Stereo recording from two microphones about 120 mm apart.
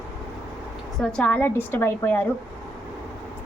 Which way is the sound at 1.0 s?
10° left (ahead or behind).